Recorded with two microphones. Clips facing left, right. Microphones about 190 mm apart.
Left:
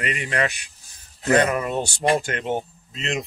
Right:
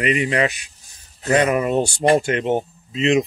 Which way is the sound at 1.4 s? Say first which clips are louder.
Right 5 dB; 15° right (ahead or behind).